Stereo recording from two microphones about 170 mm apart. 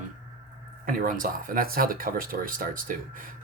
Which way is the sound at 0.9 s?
55° right (ahead or behind).